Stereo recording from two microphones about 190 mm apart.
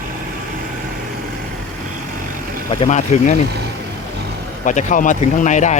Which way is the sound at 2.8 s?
40° left (ahead or behind).